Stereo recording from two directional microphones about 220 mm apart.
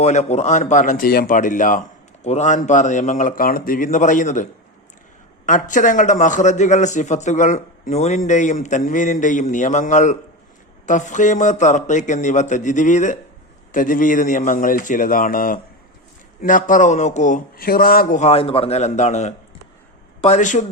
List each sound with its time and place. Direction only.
0.0 s a man's voice: 30° left (ahead or behind)
5.5 s a man's voice: 35° left (ahead or behind)